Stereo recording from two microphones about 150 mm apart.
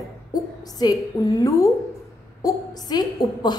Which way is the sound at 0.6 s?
25° left (ahead or behind).